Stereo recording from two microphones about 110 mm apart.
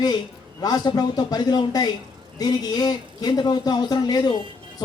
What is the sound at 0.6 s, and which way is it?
A man's voice, 40° left (ahead or behind).